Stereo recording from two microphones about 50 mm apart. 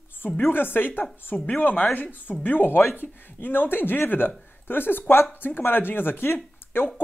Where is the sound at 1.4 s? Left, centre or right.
Left.